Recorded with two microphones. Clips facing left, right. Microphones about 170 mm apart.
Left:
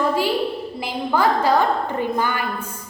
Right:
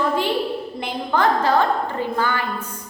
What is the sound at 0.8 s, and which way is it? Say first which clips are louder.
A woman's voice: left 1 dB; 5° left (ahead or behind).